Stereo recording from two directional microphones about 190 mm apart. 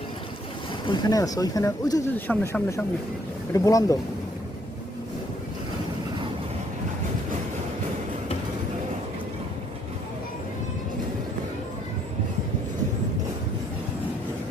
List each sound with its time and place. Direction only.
0.9 s speech: 20° left (ahead or behind)